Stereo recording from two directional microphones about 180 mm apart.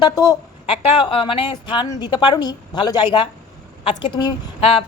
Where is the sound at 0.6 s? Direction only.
30° left (ahead or behind).